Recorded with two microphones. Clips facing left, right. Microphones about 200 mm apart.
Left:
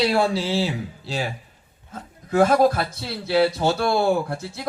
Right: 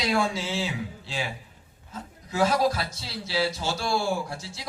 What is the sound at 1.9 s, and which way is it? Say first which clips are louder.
A man's voice: left 9 dB; 55° left (ahead or behind).